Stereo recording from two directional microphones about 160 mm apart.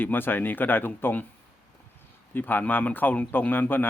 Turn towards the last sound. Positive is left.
turn(degrees=10)  # may be behind; listen again after turning